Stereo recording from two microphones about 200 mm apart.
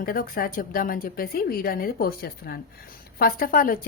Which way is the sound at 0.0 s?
45° left (ahead or behind).